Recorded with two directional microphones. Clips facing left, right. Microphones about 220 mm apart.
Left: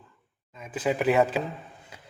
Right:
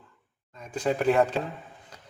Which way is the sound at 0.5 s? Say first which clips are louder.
Even; 5° left (ahead or behind).